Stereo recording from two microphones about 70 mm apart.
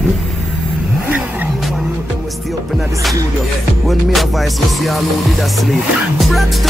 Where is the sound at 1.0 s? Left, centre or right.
Right.